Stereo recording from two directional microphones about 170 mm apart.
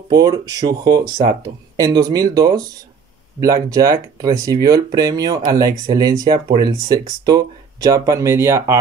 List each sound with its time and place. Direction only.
0.1 s speech: 25° right (ahead or behind)